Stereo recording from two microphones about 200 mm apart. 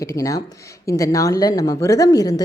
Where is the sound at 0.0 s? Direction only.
15° left (ahead or behind).